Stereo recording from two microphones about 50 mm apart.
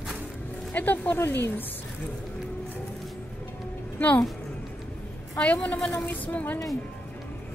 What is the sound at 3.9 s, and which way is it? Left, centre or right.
Speech, left.